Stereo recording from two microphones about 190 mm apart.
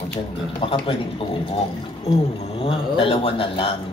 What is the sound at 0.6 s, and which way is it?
A man's voice, 30° left (ahead or behind).